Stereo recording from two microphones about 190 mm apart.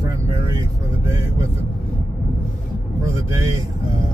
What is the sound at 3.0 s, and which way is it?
Speech, 15° right (ahead or behind).